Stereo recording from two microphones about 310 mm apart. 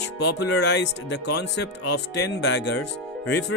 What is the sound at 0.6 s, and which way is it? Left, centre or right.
Speech, left.